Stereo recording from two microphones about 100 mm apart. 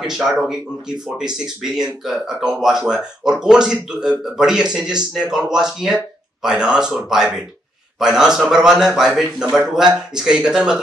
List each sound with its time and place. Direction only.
0.0 s a man's voice: 5° right (ahead or behind)